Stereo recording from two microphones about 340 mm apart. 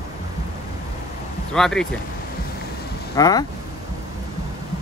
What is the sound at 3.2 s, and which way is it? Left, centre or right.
Speech, centre.